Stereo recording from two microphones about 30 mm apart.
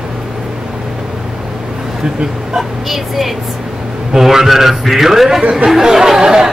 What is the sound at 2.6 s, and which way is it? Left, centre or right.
A man's voice, centre.